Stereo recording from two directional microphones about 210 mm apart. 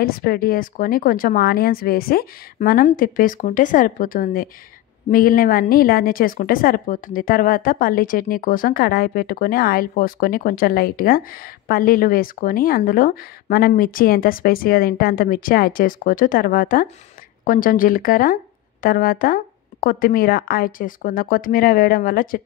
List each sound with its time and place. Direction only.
0.0 s a woman's voice: 45° left (ahead or behind)